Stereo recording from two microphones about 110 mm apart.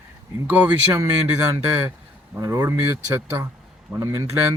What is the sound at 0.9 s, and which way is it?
A man's voice, 30° right (ahead or behind).